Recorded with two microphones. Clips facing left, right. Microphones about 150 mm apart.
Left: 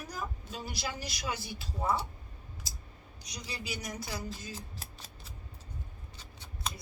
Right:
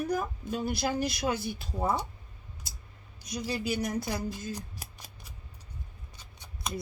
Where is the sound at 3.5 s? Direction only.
55° right (ahead or behind).